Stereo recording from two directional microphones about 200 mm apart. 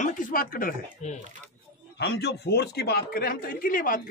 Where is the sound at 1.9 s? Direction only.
55° left (ahead or behind).